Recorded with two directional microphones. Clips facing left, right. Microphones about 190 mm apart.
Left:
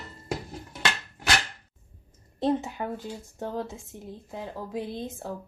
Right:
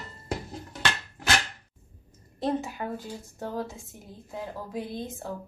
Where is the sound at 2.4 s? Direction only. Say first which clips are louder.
Left 2 dB; 20° left (ahead or behind).